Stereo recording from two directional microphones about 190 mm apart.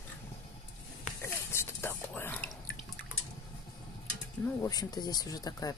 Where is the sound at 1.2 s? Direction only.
15° left (ahead or behind).